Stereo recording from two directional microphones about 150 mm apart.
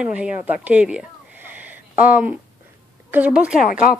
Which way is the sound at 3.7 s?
65° left (ahead or behind).